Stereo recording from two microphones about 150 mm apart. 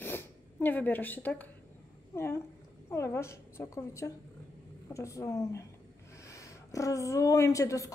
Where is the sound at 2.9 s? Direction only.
20° left (ahead or behind).